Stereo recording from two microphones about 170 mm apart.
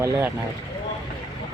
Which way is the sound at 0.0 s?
20° right (ahead or behind).